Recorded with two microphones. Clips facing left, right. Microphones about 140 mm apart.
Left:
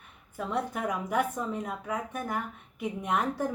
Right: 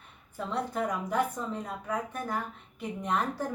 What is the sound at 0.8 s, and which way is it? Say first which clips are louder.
Speech: left 2 dB; 10° left (ahead or behind).